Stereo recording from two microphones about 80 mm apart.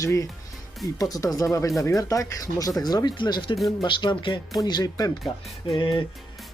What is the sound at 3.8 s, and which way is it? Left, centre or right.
Speech, left.